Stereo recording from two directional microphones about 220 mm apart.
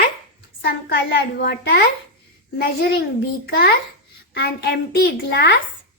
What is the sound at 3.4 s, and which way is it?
A woman's voice, 45° left (ahead or behind).